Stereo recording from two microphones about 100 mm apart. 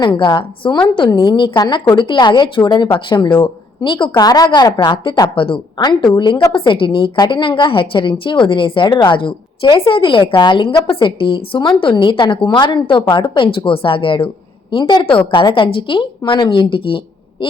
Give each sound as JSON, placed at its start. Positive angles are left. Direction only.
{"t": 0.0, "sound": "a woman's voice", "side_deg": 50}
{"t": 5.3, "sound": "a woman's voice", "side_deg": 60}
{"t": 17.4, "sound": "a sound", "side_deg": 55}